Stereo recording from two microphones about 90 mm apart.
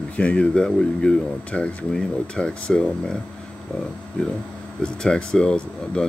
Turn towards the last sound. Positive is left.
turn(degrees=10)  # may be behind; listen again after turning